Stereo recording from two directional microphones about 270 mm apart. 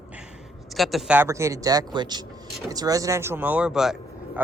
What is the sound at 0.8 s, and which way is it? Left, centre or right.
Speech, centre.